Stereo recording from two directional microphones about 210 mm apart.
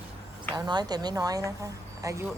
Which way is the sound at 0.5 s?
20° right (ahead or behind).